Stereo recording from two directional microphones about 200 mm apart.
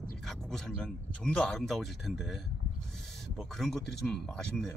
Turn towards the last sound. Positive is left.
turn(degrees=5)  # may be behind; listen again after turning